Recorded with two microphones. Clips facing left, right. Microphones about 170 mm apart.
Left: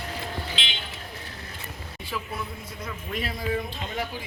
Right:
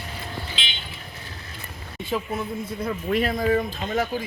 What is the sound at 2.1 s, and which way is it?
Speech, 45° right (ahead or behind).